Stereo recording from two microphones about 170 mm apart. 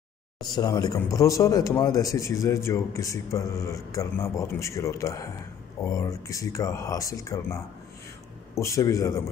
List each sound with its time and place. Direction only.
0.6 s a man's voice: 20° left (ahead or behind)